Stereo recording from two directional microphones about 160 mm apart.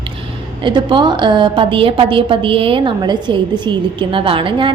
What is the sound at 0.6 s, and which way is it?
A woman's voice, 30° right (ahead or behind).